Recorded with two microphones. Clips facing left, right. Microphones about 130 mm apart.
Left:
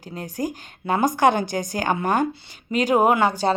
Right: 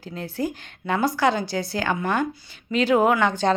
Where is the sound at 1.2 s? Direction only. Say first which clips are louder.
Left 3 dB; 55° left (ahead or behind).